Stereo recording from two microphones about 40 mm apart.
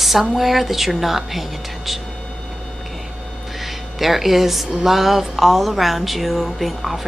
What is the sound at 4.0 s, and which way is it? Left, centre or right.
A woman's voice, centre.